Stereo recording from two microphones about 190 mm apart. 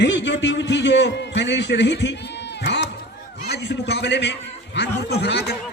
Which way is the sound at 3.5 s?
65° left (ahead or behind).